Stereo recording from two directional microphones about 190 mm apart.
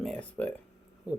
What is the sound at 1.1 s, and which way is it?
Speech, 5° right (ahead or behind).